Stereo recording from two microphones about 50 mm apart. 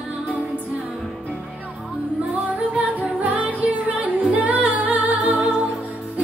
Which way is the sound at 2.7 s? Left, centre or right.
Right.